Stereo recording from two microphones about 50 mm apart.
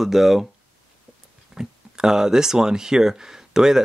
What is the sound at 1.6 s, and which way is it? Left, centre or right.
Speech, centre.